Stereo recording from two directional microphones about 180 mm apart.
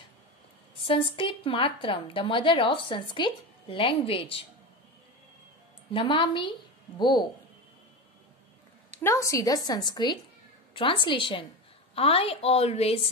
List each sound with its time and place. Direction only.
0.7 s a woman's voice: 30° left (ahead or behind)
5.9 s a woman's voice: 30° left (ahead or behind)
9.0 s a woman's voice: 15° left (ahead or behind); by 13.1 s 35° left (ahead or behind)